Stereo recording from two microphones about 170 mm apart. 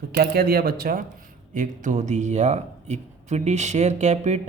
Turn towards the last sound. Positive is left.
turn(degrees=-40)  # may be behind; listen again after turning